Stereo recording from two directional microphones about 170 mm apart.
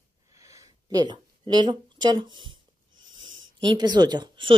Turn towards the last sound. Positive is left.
turn(degrees=-25)  # may be behind; listen again after turning